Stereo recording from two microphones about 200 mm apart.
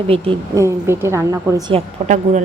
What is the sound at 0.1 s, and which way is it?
Speech, 30° right (ahead or behind).